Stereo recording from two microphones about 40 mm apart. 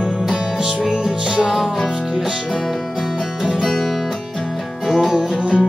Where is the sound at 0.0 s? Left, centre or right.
Centre.